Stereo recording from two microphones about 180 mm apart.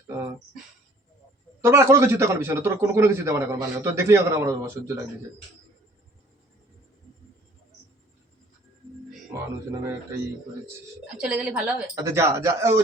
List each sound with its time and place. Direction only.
1.6 s a man's voice: 15° right (ahead or behind)
9.3 s a sound: 15° right (ahead or behind)
11.1 s a man's voice: 5° right (ahead or behind)